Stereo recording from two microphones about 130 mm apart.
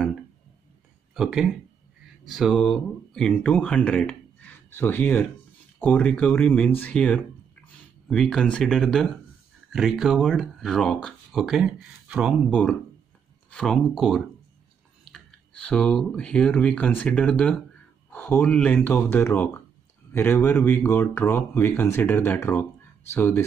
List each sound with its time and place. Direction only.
1.1 s speech: 5° right (ahead or behind)
12.4 s speech: 10° left (ahead or behind)